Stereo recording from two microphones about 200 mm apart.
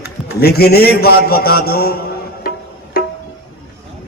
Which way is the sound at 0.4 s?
50° left (ahead or behind).